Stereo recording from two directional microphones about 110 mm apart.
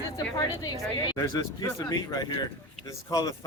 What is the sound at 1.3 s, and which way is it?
A woman's voice, 30° left (ahead or behind).